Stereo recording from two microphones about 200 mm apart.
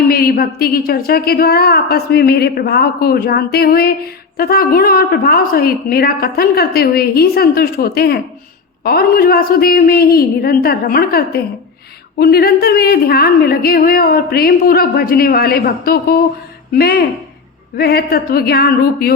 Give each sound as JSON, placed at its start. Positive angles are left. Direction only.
{"t": 0.1, "sound": "a woman's voice", "side_deg": 50}